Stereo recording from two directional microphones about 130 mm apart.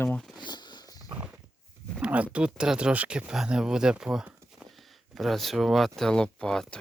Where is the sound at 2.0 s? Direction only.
10° right (ahead or behind).